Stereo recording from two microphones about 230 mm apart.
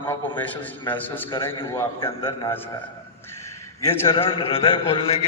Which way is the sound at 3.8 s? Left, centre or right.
Centre.